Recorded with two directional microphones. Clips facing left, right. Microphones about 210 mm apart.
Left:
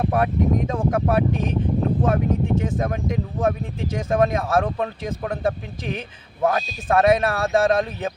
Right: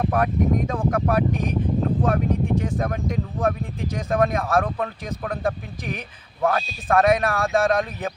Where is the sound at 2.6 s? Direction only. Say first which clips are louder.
Left 1 dB; 20° left (ahead or behind).